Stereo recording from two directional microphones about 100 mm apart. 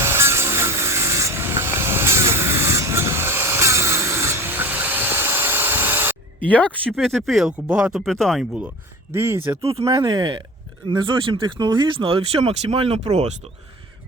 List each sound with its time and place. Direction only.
0.0 s wood: 25° right (ahead or behind)
6.5 s speech: 15° left (ahead or behind)
6.9 s speech: centre (ahead or behind)
8.1 s speech: 5° left (ahead or behind)
9.1 s speech: 25° right (ahead or behind)
9.6 s speech: 75° right (ahead or behind)
9.8 s speech: 40° right (ahead or behind); by 13.3 s 90° right